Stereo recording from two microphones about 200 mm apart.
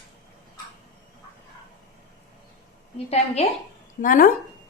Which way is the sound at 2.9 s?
30° left (ahead or behind).